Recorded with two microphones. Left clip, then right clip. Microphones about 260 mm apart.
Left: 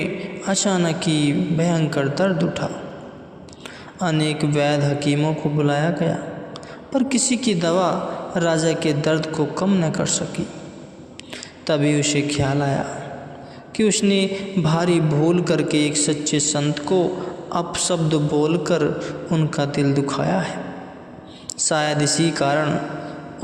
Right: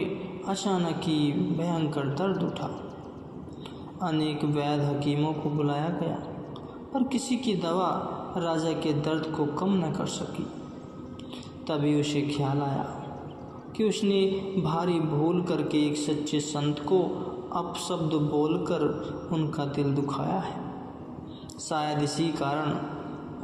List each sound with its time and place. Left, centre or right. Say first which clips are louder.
0.0 s a man's voice: left 6 dB; left
4.0 s a man's voice: left 7 dB; left
11.6 s a man's voice: left 8 dB; left
13.7 s a man's voice: left 7 dB; left
21.6 s a man's voice: left 9 dB; left